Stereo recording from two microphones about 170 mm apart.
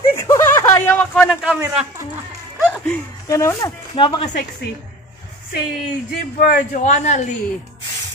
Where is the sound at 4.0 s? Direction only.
30° left (ahead or behind).